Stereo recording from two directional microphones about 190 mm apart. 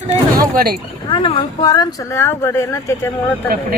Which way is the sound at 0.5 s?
55° right (ahead or behind).